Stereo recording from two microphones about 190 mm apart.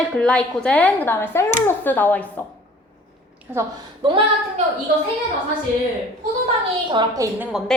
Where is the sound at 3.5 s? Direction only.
20° right (ahead or behind).